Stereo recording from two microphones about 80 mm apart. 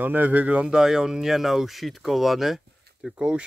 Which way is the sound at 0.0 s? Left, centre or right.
Right.